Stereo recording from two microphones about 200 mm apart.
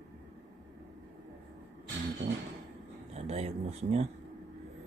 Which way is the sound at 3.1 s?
30° right (ahead or behind).